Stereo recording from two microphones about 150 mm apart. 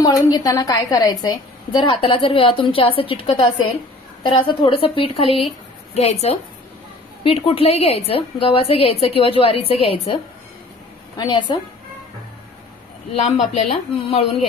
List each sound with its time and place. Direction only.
0.0 s a woman's voice: 25° left (ahead or behind); by 10.1 s 40° left (ahead or behind)
11.1 s a woman's voice: 30° left (ahead or behind)
13.6 s speech: 40° left (ahead or behind)